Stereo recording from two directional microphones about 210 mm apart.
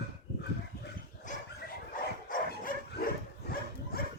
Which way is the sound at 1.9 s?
45° left (ahead or behind).